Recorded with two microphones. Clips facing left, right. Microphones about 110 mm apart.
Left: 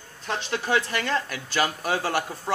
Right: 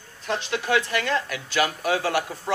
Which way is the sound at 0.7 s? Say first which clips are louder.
Right 1 dB; centre (ahead or behind).